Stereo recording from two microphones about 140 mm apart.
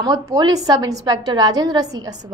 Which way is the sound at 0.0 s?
30° right (ahead or behind).